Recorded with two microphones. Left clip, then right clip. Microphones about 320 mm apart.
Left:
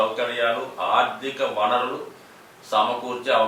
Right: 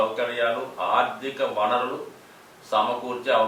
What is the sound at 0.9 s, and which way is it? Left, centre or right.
A man's voice, centre.